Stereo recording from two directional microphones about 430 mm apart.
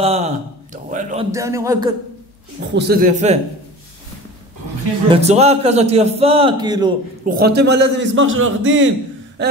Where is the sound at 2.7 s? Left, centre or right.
Right.